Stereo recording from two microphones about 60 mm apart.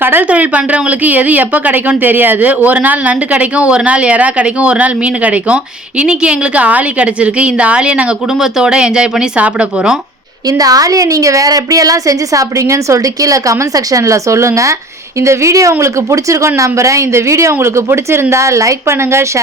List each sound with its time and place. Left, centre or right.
0.0 s speech: right
0.3 s a woman's voice: right
10.6 s a woman's voice: right